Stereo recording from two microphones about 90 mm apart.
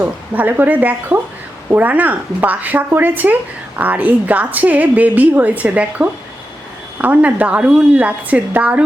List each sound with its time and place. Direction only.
0.0 s a woman's voice: 20° right (ahead or behind)